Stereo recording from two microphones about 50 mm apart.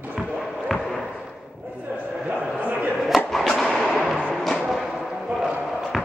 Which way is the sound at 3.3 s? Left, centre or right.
Centre.